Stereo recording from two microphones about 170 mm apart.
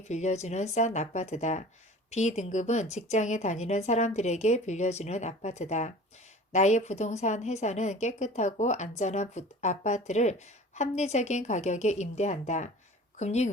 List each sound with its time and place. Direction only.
0.1 s speech: 40° left (ahead or behind)